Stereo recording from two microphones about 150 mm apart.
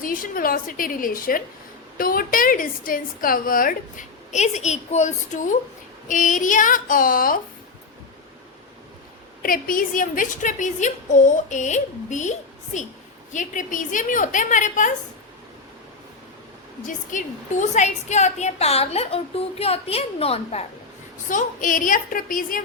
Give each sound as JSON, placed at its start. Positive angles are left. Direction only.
{"t": 0.0, "sound": "a woman's voice", "side_deg": 65}
{"t": 9.4, "sound": "a woman's voice", "side_deg": 70}
{"t": 13.3, "sound": "a woman's voice", "side_deg": 60}
{"t": 16.8, "sound": "a woman's voice", "side_deg": 55}
{"t": 21.2, "sound": "a woman's voice", "side_deg": 60}